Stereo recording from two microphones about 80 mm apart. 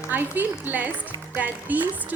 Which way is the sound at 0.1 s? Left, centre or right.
Right.